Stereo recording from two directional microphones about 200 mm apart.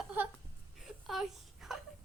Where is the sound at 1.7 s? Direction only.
Centre (ahead or behind).